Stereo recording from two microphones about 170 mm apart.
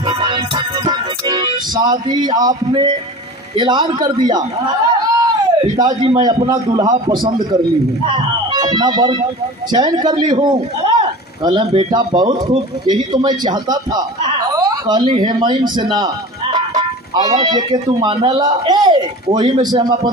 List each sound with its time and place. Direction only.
0.0 s music: 30° right (ahead or behind)
3.5 s a man's voice: 25° right (ahead or behind)
5.1 s a sound: 20° right (ahead or behind)
6.2 s a man's voice: 25° right (ahead or behind)